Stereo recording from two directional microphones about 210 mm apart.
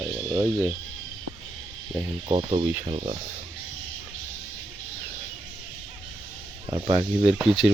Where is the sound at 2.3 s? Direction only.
20° right (ahead or behind).